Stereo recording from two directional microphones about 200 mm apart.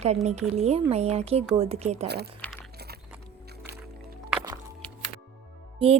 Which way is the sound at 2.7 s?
55° right (ahead or behind).